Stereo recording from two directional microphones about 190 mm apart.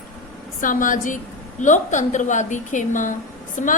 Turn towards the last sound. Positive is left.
turn(degrees=40)  # may be behind; listen again after turning